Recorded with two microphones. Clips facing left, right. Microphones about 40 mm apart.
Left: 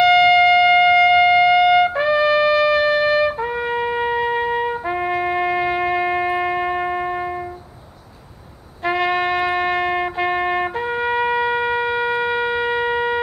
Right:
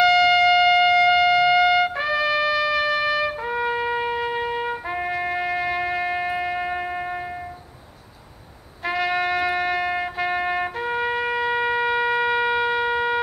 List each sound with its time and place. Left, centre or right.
0.0 s siren: centre
1.5 s trumpet: centre
2.8 s trumpet: centre
8.8 s trumpet: centre